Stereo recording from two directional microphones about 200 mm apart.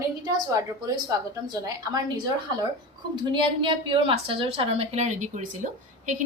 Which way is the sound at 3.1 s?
25° right (ahead or behind).